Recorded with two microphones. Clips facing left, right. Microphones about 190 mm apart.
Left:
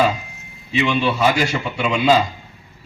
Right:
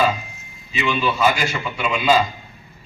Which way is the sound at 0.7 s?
70° left (ahead or behind).